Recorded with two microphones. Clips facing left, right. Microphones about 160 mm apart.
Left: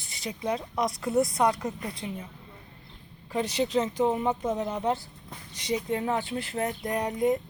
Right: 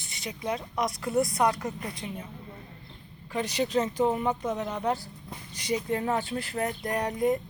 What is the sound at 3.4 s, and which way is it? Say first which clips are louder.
A woman's voice: left 1 dB; 30° left (ahead or behind).